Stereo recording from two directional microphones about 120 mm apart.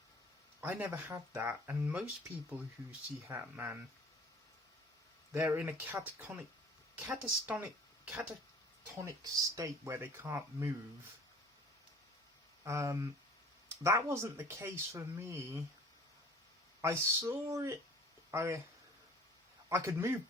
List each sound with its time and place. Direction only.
0.6 s speech: 15° right (ahead or behind)
3.2 s speech: 15° right (ahead or behind)
5.3 s speech: 15° right (ahead or behind)
9.0 s speech: 25° right (ahead or behind)
12.6 s speech: 25° right (ahead or behind)
16.8 s speech: 20° right (ahead or behind)
19.7 s speech: 20° right (ahead or behind)